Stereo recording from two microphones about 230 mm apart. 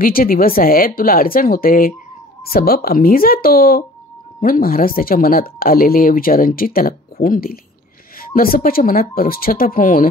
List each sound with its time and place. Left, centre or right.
0.0 s speech: left